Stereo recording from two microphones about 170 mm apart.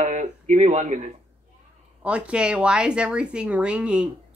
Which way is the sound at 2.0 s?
5° right (ahead or behind).